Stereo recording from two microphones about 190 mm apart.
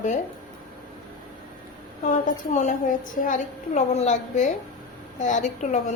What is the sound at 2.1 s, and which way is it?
A woman's voice, 40° left (ahead or behind).